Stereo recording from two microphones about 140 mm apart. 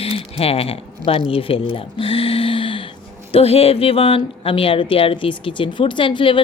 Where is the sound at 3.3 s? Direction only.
45° left (ahead or behind).